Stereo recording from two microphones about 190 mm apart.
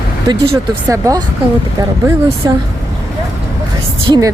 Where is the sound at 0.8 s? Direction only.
20° right (ahead or behind).